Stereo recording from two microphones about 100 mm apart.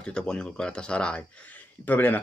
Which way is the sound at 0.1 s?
10° left (ahead or behind).